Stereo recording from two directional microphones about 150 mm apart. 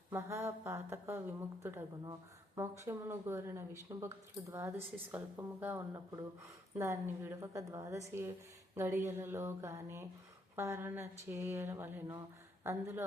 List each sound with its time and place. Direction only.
0.1 s a woman's voice: 20° right (ahead or behind)